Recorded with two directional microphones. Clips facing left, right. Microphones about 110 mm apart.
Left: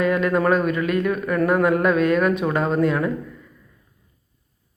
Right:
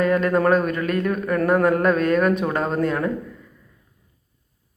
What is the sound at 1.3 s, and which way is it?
Speech, 40° right (ahead or behind).